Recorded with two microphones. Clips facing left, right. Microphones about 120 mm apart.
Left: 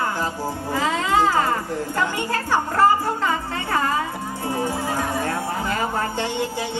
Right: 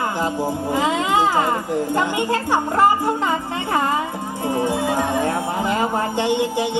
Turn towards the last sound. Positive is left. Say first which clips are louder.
# right 5 dB
turn(degrees=-15)  # may be behind; listen again after turning